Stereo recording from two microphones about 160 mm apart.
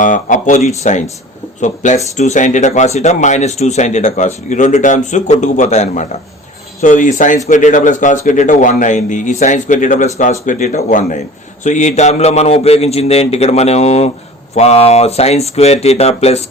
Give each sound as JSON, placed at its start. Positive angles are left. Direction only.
{"t": 0.0, "sound": "a man's voice", "side_deg": 55}